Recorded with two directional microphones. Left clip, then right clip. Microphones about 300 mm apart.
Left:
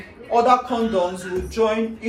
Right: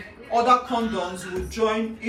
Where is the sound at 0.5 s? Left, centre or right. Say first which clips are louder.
Left 4 dB; centre.